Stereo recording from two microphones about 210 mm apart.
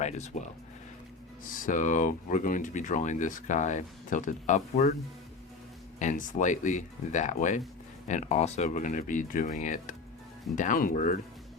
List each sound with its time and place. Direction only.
0.0 s speech: 35° left (ahead or behind)
6.0 s speech: 35° left (ahead or behind)